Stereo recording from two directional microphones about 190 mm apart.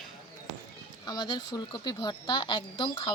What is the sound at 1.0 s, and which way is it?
Speech, 20° left (ahead or behind).